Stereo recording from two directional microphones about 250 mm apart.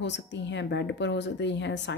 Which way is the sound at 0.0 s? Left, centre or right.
Left.